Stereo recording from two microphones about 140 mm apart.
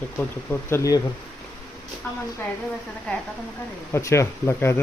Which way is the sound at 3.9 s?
20° left (ahead or behind).